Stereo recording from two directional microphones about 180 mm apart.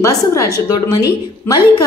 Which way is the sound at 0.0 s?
15° left (ahead or behind).